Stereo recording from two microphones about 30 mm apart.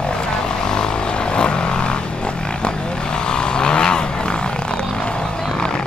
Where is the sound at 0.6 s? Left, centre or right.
Left.